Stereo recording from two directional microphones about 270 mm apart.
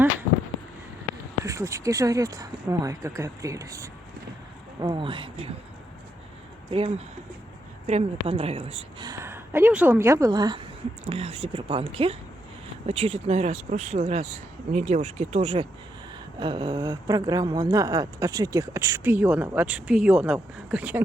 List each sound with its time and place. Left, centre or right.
1.5 s speech: centre
6.7 s speech: right; by 21.0 s centre